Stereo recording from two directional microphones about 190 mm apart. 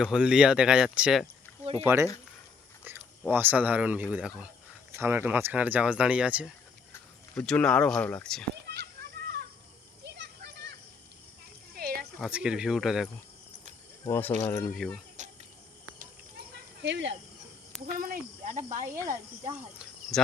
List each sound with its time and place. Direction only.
0.0 s speech: 5° right (ahead or behind)
3.3 s speech: 10° right (ahead or behind)
8.6 s children playing: 60° right (ahead or behind)
11.7 s a sound: 50° right (ahead or behind)
12.2 s speech: 5° right (ahead or behind)
14.0 s speech: 10° left (ahead or behind)
16.8 s speech: 70° right (ahead or behind)
17.8 s speech: 50° right (ahead or behind)
18.9 s speech: 15° right (ahead or behind)
19.8 s cricket: centre (ahead or behind)